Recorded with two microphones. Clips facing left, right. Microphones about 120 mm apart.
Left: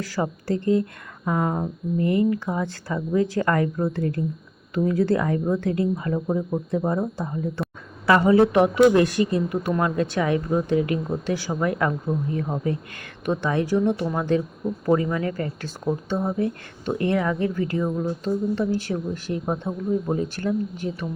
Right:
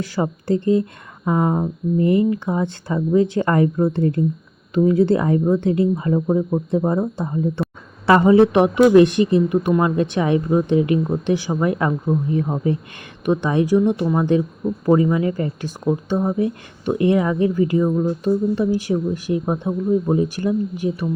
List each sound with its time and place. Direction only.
0.0 s speech: 20° right (ahead or behind)